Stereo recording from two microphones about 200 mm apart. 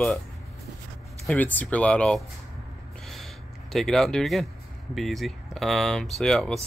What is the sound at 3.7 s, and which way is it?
Speech, centre (ahead or behind).